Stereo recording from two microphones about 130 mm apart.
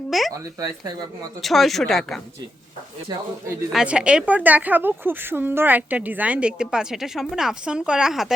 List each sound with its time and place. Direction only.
0.1 s speech: centre (ahead or behind)
0.3 s speech: 30° right (ahead or behind)
1.4 s speech: centre (ahead or behind)
3.7 s a woman's voice: 5° right (ahead or behind)